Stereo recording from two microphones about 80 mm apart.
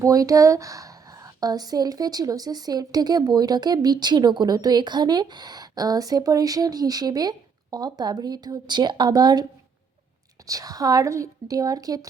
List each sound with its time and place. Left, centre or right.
0.0 s a woman's voice: right
10.4 s a woman's voice: right